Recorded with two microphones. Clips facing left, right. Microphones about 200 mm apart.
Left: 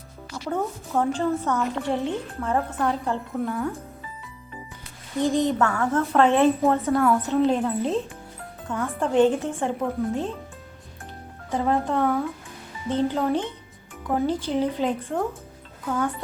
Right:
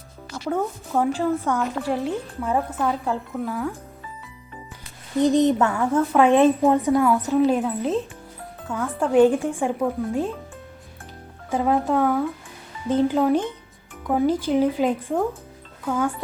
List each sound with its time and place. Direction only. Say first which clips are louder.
0.4 s a woman's voice: right 2 dB; centre (ahead or behind)
5.2 s a woman's voice: right 4 dB; 15° right (ahead or behind)
11.5 s a woman's voice: right 3 dB; 5° right (ahead or behind)